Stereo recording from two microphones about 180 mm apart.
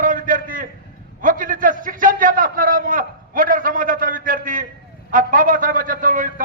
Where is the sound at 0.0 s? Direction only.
50° right (ahead or behind).